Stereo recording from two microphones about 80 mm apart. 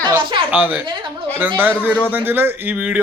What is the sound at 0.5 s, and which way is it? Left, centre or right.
Speech, right.